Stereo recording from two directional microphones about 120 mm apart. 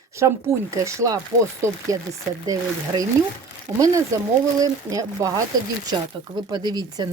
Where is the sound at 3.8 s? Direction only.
25° right (ahead or behind).